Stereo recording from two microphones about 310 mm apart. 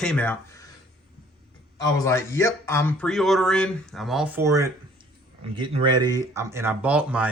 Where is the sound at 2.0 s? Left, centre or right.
Centre.